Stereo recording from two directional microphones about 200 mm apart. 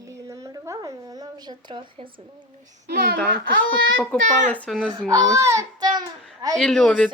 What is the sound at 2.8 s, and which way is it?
Speech, 55° right (ahead or behind).